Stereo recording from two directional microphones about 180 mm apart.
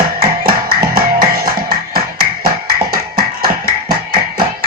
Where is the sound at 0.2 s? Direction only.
55° right (ahead or behind).